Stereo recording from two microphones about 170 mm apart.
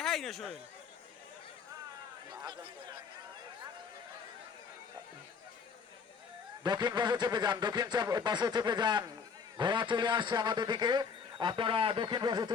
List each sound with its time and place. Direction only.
0.0 s speech: centre (ahead or behind)
2.3 s a sound: 25° right (ahead or behind)
6.6 s a man's voice: 25° right (ahead or behind)